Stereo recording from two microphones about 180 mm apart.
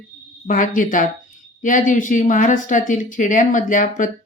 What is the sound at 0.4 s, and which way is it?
Speech, 45° left (ahead or behind).